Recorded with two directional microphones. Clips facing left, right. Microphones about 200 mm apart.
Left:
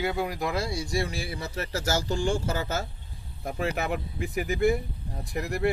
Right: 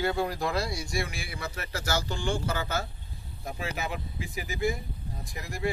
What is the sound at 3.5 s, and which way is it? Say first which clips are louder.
Speech: left 5 dB; 55° left (ahead or behind).